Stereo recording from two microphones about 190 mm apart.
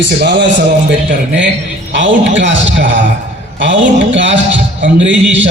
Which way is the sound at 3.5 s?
70° right (ahead or behind).